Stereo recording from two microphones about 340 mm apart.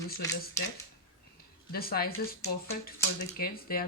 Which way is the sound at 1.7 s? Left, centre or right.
Left.